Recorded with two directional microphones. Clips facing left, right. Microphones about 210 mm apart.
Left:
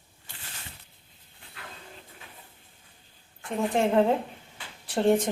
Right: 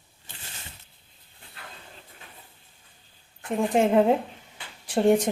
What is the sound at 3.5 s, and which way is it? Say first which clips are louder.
A woman's voice: right 3 dB; 15° right (ahead or behind).